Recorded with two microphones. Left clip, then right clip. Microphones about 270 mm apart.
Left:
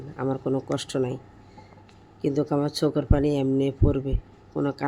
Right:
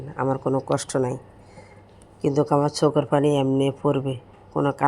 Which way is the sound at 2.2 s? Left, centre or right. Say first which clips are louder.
Right 5 dB; centre.